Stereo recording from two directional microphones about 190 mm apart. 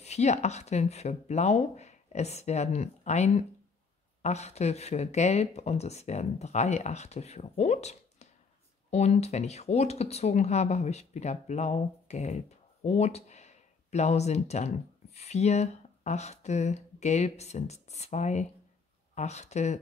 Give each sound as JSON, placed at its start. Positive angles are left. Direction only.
{"t": 0.0, "sound": "speech", "side_deg": 35}